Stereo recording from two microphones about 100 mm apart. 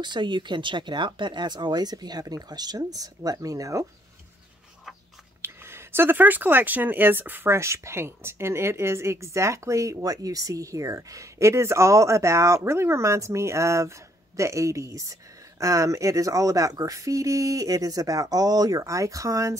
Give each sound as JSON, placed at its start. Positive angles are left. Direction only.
{"t": 0.0, "sound": "speech", "side_deg": -50}
{"t": 5.4, "sound": "speech", "side_deg": -25}